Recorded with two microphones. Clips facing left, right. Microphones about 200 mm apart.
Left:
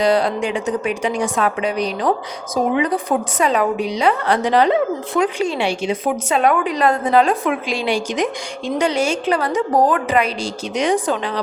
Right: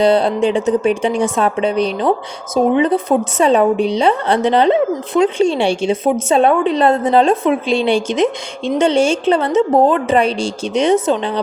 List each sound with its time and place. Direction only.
0.0 s a woman's voice: 25° right (ahead or behind)